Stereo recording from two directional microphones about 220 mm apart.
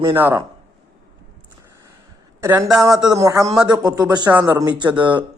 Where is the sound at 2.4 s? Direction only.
10° right (ahead or behind).